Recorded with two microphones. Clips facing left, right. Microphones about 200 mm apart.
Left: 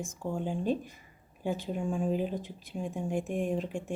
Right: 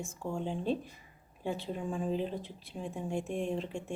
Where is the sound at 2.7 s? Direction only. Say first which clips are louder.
Left 3 dB; centre (ahead or behind).